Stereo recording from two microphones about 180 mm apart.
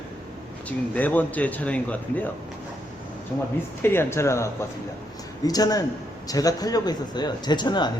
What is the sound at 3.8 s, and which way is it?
Speech, 15° left (ahead or behind).